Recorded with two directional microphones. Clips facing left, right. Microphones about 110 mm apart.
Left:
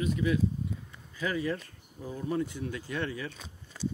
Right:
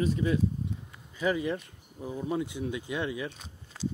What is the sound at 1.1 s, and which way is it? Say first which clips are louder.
Speech: right 3 dB; 20° right (ahead or behind).